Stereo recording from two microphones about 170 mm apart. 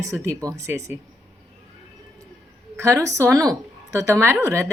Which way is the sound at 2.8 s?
20° right (ahead or behind).